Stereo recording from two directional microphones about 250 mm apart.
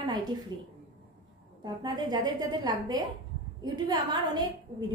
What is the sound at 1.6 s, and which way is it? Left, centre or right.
A woman's voice, centre.